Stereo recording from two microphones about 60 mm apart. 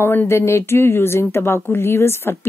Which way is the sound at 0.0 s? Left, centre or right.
Left.